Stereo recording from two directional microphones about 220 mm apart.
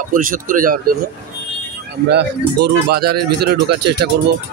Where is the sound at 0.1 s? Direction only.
40° right (ahead or behind).